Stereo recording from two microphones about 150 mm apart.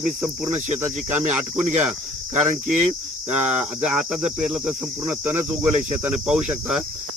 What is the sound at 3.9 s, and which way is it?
Speech, 5° right (ahead or behind).